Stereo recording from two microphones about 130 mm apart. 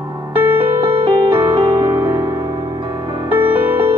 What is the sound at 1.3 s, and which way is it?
Music, 20° right (ahead or behind).